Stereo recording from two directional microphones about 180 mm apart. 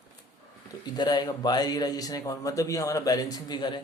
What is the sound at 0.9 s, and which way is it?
Mantra, 25° left (ahead or behind).